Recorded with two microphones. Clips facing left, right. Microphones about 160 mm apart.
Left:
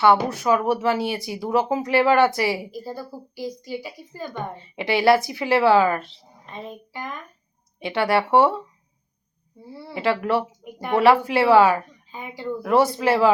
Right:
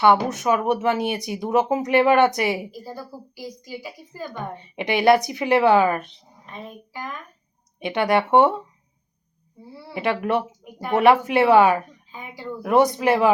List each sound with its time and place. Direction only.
0.0 s a woman's voice: 20° right (ahead or behind)
7.8 s speech: 20° right (ahead or behind)
9.9 s speech: 20° right (ahead or behind)